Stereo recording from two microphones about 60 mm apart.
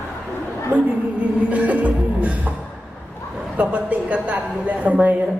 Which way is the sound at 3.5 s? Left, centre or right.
Right.